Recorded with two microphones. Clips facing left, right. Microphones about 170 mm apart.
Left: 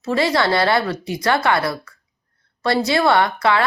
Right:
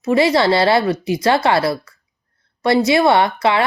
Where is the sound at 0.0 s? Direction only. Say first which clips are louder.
Right 4 dB; 20° right (ahead or behind).